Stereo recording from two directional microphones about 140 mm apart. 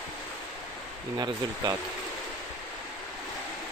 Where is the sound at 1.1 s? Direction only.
30° right (ahead or behind).